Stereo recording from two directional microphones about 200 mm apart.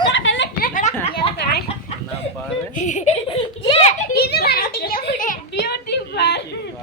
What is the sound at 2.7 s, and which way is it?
Giggle, 35° left (ahead or behind).